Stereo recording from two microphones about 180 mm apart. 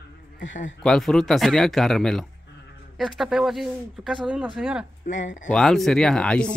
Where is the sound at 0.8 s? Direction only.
5° left (ahead or behind).